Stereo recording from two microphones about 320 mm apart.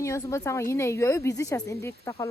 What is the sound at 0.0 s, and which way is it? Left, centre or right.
Speech, centre.